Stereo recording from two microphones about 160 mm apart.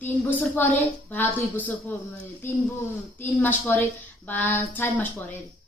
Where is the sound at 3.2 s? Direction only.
15° left (ahead or behind).